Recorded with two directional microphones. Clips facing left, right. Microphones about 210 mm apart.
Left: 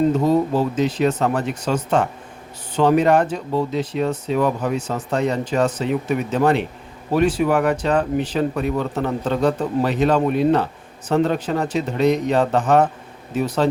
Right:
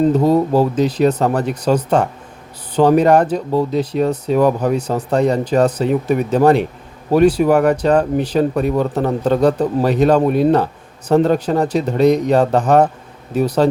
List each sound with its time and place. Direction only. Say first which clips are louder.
0.0 s speech: right 3 dB; 35° right (ahead or behind)